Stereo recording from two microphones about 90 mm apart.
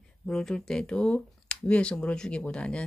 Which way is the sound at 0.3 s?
5° left (ahead or behind).